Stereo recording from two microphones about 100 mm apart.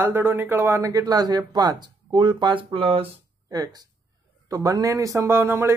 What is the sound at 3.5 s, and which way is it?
A man's voice, 40° right (ahead or behind).